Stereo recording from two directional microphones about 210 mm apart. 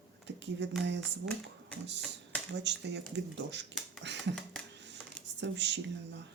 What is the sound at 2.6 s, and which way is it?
Speech, 55° right (ahead or behind).